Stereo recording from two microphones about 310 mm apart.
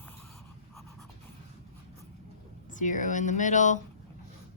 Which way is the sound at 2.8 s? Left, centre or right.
Left.